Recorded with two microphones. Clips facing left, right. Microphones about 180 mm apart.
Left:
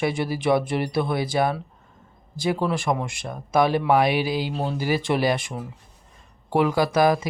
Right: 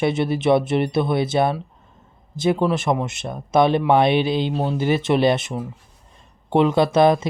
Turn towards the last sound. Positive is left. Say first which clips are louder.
# right 4 dB
turn(degrees=-25)  # may be behind; listen again after turning